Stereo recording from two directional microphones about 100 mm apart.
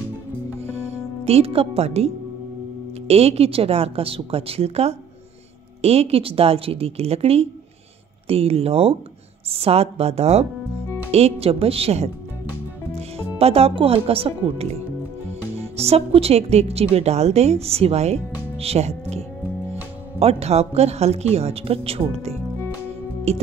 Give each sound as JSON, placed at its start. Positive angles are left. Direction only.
{"t": 0.7, "sound": "a woman's voice", "side_deg": -90}
{"t": 15.6, "sound": "a woman's voice", "side_deg": -90}